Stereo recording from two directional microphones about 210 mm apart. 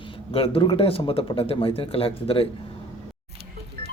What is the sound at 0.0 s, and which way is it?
Speech, 25° left (ahead or behind).